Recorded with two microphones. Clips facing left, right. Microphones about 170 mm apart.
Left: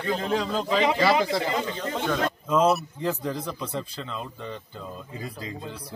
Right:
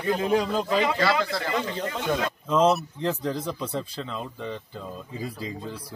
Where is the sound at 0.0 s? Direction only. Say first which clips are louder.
Right 3 dB; 10° right (ahead or behind).